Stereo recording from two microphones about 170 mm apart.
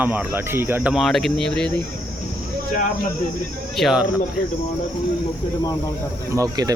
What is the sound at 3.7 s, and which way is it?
Speech, centre (ahead or behind).